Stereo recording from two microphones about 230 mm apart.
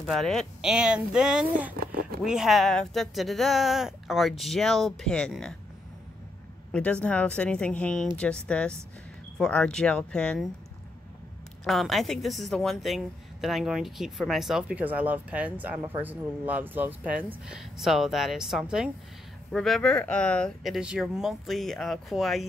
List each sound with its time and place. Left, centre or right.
0.0 s a woman's voice: centre
1.7 s a sound: right
2.2 s a woman's voice: centre
6.7 s a woman's voice: centre
11.6 s a woman's voice: centre